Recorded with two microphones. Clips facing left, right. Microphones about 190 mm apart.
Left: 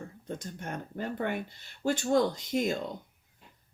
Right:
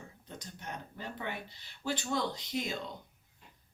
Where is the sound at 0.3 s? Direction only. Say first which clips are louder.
Left 7 dB; 50° left (ahead or behind).